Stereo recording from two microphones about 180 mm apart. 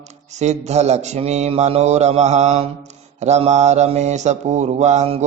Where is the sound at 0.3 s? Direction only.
40° right (ahead or behind).